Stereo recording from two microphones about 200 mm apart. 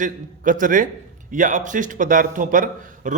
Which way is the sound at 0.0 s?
40° right (ahead or behind).